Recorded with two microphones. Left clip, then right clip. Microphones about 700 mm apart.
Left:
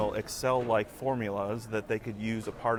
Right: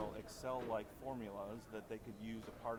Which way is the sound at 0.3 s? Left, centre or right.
Left.